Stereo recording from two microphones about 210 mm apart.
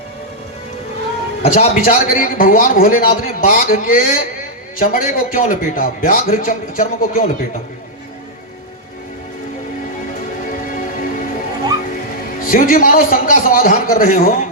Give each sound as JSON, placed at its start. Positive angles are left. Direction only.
{"t": 1.4, "sound": "a man's voice", "side_deg": 35}
{"t": 10.4, "sound": "music", "side_deg": 40}
{"t": 12.5, "sound": "a man's voice", "side_deg": 40}